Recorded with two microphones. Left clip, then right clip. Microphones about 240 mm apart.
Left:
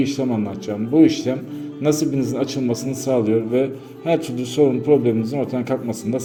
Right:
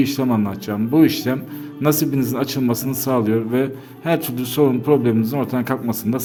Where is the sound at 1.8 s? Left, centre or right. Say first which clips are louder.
Right 1 dB; right.